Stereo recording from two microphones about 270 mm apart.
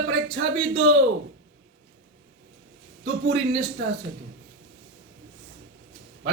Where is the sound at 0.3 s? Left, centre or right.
Right.